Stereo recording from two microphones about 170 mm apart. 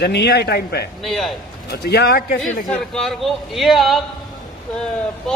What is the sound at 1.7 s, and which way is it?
Speech, 75° left (ahead or behind).